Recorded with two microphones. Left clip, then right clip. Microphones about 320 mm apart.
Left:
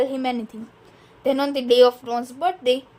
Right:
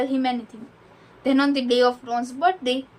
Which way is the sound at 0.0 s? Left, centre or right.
Left.